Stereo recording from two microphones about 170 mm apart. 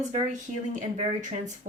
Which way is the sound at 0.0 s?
45° right (ahead or behind).